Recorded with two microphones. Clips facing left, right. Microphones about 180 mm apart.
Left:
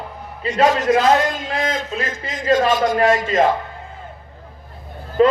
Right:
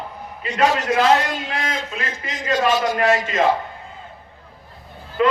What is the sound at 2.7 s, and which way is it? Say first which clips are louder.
Speech: left 2 dB; 50° left (ahead or behind).